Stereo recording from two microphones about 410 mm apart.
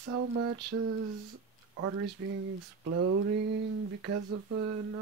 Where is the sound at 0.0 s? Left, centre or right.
Right.